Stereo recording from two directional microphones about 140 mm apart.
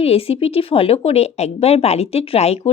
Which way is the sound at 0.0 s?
45° left (ahead or behind).